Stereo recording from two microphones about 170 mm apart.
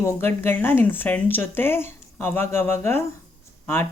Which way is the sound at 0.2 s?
10° left (ahead or behind).